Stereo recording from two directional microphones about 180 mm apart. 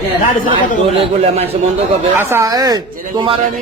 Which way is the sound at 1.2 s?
35° right (ahead or behind).